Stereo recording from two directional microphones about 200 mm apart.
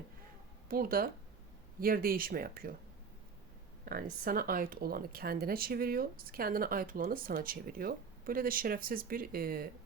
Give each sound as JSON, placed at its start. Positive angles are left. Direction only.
{"t": 0.7, "sound": "speech", "side_deg": -45}
{"t": 3.8, "sound": "speech", "side_deg": -50}